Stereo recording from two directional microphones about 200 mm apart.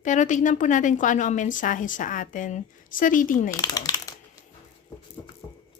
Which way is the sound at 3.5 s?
20° left (ahead or behind).